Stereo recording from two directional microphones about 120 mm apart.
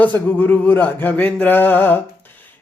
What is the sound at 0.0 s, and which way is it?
Speech, 15° left (ahead or behind).